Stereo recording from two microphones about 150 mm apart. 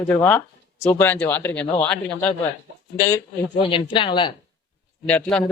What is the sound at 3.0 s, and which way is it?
Speech, 20° left (ahead or behind).